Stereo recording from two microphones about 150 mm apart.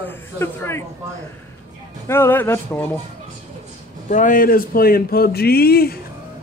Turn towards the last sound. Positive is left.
turn(degrees=90)